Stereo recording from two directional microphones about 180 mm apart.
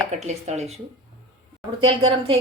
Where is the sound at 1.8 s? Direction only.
30° right (ahead or behind).